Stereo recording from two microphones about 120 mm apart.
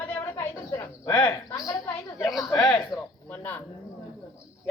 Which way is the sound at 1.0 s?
30° left (ahead or behind).